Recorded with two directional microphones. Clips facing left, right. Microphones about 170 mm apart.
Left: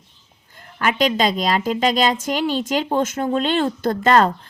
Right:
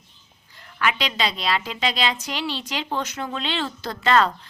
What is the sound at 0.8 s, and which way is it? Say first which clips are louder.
Speech: left 6 dB; 45° left (ahead or behind).